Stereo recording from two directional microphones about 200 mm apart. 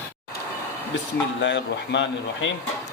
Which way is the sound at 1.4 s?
65° left (ahead or behind).